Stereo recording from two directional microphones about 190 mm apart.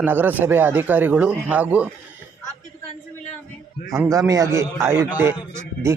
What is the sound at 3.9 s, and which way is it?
Speech, 15° right (ahead or behind).